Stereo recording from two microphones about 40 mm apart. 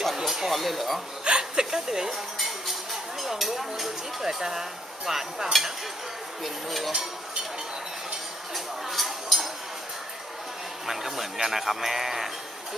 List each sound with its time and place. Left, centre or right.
0.2 s speech: centre
0.6 s dishes: centre
1.2 s a woman's voice: right
3.2 s speech: centre
6.4 s dishes: centre
8.5 s a sound: centre
10.8 s dishes: centre
11.3 s speech: centre